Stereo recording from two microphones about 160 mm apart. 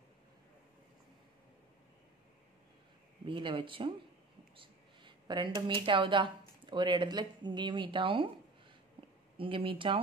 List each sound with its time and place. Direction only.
3.3 s a woman's voice: 30° right (ahead or behind)
4.6 s a sound: 30° right (ahead or behind)
5.9 s a woman's voice: 30° right (ahead or behind)
9.4 s a woman's voice: 35° right (ahead or behind)